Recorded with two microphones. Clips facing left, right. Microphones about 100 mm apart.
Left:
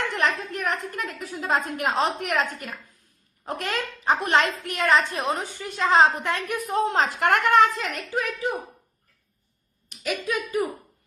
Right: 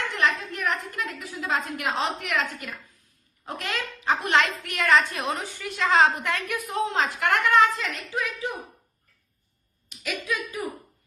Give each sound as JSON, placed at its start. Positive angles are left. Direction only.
{"t": 0.1, "sound": "a woman's voice", "side_deg": 45}
{"t": 10.0, "sound": "a woman's voice", "side_deg": 35}